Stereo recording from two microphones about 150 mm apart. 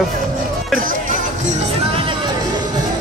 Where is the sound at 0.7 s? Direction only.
65° right (ahead or behind).